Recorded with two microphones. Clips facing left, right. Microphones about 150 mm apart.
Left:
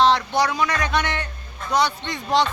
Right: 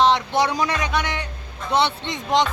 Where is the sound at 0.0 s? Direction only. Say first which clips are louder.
Even; 20° right (ahead or behind).